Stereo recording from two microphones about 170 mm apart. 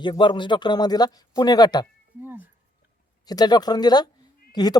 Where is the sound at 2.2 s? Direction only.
10° right (ahead or behind).